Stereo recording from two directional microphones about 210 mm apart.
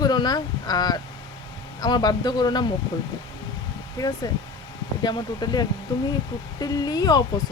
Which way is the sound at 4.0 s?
20° left (ahead or behind).